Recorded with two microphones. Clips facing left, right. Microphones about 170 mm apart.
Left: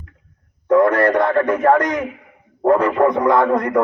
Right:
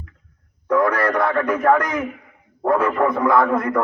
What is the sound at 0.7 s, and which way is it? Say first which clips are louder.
A man's voice: left 5 dB; 20° left (ahead or behind).